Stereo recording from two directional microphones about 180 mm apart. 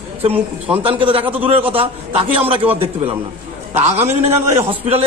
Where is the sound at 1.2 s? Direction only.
10° right (ahead or behind).